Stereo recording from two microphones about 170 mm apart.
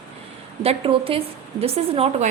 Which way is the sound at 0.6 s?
35° right (ahead or behind).